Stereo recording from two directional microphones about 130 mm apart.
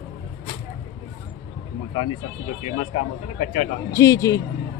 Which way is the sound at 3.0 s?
55° left (ahead or behind).